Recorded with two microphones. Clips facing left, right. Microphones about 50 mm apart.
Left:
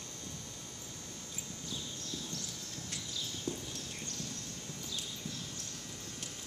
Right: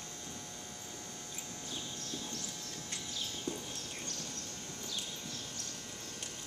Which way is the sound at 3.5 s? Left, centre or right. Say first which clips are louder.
Left 1 dB; centre.